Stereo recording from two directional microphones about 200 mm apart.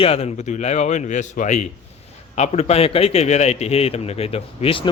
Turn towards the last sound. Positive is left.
turn(degrees=25)  # may be behind; listen again after turning